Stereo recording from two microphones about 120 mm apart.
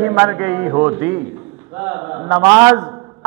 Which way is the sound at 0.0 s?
20° right (ahead or behind).